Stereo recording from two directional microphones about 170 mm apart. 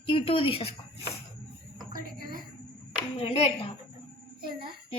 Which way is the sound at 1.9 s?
55° right (ahead or behind).